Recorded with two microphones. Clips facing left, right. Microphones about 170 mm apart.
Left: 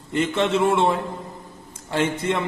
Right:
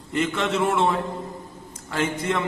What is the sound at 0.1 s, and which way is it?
A man's voice, 30° left (ahead or behind).